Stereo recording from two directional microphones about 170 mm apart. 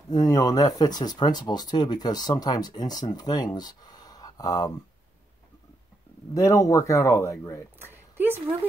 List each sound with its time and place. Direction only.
0.1 s speech: 20° left (ahead or behind)
6.3 s speech: 20° left (ahead or behind)
7.8 s a sound: 10° right (ahead or behind)